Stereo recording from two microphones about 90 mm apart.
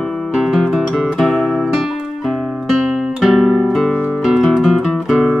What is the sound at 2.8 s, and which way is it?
Guitar, centre (ahead or behind).